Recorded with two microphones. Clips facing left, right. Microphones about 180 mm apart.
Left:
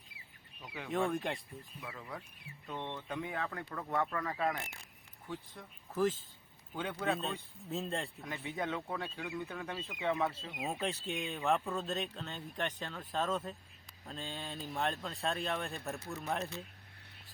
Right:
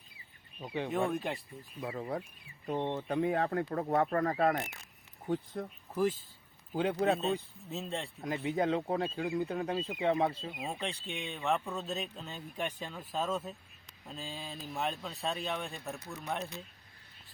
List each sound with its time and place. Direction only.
1.1 s speech: centre (ahead or behind)
1.8 s speech: 40° right (ahead or behind)
5.9 s speech: 10° right (ahead or behind)
6.7 s speech: 35° right (ahead or behind)
7.2 s speech: centre (ahead or behind)
8.5 s speech: 35° right (ahead or behind)
10.6 s speech: 5° left (ahead or behind)